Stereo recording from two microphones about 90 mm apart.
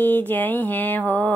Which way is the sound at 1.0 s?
15° left (ahead or behind).